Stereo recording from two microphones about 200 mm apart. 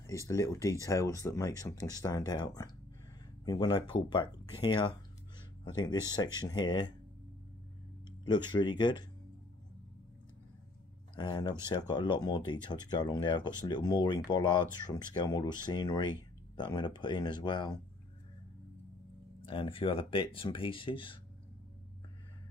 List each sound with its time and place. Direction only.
0.0 s speech: 15° left (ahead or behind)
8.3 s speech: 20° left (ahead or behind)
11.1 s speech: 20° left (ahead or behind)
19.4 s speech: 25° left (ahead or behind)